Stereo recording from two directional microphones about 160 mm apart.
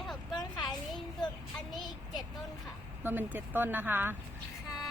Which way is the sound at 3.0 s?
10° right (ahead or behind).